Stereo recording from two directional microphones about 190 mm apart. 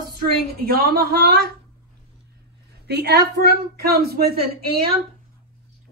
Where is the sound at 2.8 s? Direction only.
60° right (ahead or behind).